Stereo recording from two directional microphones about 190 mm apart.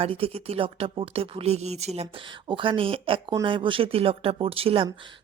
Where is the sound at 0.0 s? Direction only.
30° right (ahead or behind).